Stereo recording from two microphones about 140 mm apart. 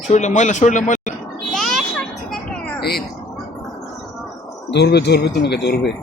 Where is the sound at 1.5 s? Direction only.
5° left (ahead or behind).